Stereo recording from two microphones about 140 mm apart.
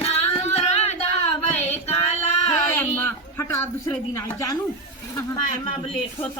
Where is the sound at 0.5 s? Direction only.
50° left (ahead or behind).